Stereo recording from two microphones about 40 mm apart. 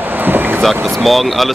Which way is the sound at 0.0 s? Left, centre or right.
Right.